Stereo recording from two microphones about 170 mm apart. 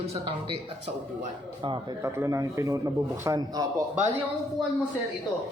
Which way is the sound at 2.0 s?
15° right (ahead or behind).